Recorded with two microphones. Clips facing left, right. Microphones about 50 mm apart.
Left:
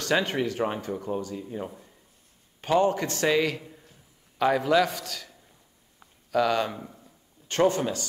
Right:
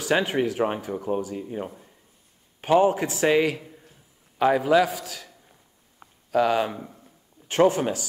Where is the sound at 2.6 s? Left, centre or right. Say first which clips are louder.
Right 3 dB; centre.